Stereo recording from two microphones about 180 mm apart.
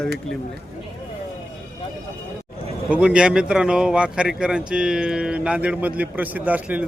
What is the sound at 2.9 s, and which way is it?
A man's voice, 5° right (ahead or behind).